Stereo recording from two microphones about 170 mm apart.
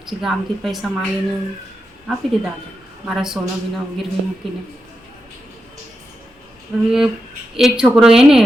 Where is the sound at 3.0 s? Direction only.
Centre (ahead or behind).